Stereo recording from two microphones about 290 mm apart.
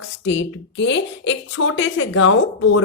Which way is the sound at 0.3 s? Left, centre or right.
Left.